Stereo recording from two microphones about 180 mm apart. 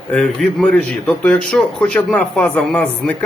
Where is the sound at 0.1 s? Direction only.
5° left (ahead or behind).